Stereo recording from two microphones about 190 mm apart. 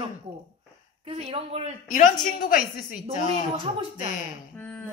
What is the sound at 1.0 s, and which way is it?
Speech, 30° right (ahead or behind).